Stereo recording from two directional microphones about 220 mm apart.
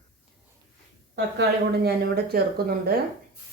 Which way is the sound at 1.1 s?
50° right (ahead or behind).